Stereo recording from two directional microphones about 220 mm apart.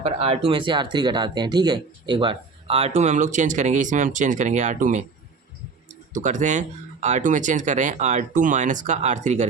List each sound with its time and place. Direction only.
0.0 s speech: 30° right (ahead or behind)
6.1 s speech: 35° right (ahead or behind)